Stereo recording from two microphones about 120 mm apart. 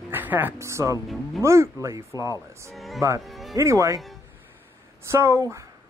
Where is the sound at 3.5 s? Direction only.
25° right (ahead or behind).